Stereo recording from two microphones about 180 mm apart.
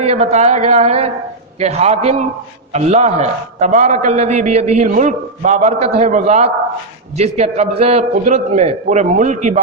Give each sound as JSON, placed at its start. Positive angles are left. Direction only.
{"t": 0.0, "sound": "a man's voice", "side_deg": -35}